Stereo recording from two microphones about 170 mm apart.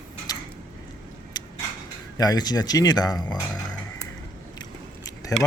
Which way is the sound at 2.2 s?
25° left (ahead or behind).